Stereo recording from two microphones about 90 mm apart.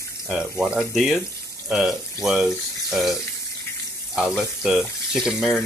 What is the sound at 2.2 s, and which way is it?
Speech, 5° right (ahead or behind).